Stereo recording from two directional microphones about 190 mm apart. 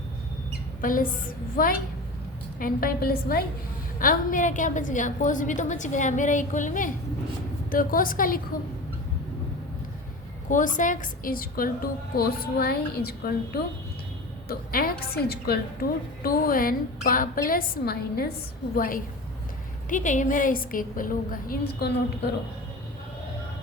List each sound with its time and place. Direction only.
0.8 s a woman's voice: 45° left (ahead or behind)
10.8 s a woman's voice: 45° left (ahead or behind)